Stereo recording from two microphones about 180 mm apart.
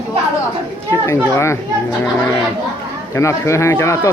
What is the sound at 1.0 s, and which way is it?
Speech, 15° left (ahead or behind).